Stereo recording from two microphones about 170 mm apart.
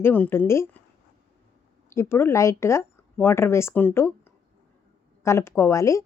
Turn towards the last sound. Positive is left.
turn(degrees=20)  # may be behind; listen again after turning